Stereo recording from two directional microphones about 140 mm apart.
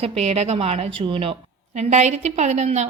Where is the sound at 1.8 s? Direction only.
55° right (ahead or behind).